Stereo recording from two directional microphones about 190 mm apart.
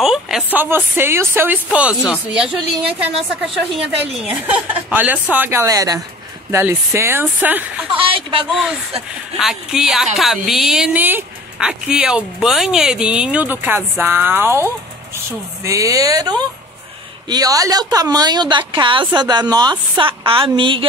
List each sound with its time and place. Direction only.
0.0 s a woman's voice: centre (ahead or behind)
3.7 s a woman's voice: 5° right (ahead or behind)
8.0 s a woman's voice: 30° right (ahead or behind)
9.4 s a woman's voice: centre (ahead or behind); by 20.8 s 25° right (ahead or behind)